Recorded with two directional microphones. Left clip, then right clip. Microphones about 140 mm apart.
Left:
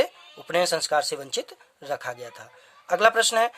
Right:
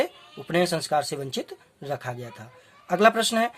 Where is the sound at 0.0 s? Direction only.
40° left (ahead or behind).